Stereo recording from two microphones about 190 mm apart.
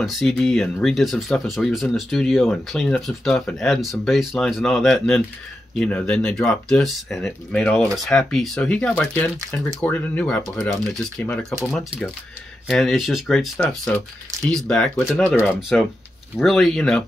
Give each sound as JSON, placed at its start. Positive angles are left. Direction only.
{"t": 0.0, "sound": "speech", "side_deg": 0}